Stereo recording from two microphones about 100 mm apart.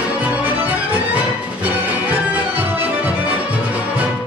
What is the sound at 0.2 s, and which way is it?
Music, 15° right (ahead or behind).